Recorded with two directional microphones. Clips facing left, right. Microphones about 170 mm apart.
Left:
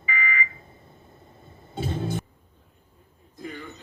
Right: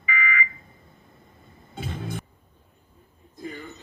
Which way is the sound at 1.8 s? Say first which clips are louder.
Left 5 dB; 30° left (ahead or behind).